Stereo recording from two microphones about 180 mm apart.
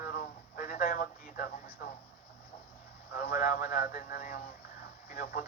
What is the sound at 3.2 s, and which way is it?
Speech, 55° left (ahead or behind).